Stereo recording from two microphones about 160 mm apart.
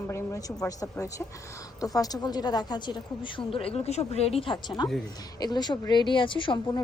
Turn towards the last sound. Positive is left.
turn(degrees=30)  # may be behind; listen again after turning